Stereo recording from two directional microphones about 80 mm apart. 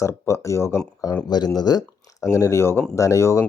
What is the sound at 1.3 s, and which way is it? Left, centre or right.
Speech, left.